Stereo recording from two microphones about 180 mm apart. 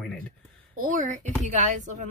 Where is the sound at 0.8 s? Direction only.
45° right (ahead or behind).